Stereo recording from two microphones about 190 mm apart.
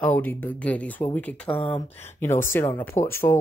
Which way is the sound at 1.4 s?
25° left (ahead or behind).